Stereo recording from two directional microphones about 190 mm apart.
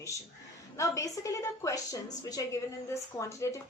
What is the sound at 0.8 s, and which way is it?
A woman's voice, 15° left (ahead or behind).